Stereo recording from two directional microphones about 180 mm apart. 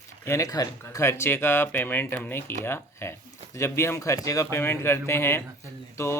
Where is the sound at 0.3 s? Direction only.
20° left (ahead or behind).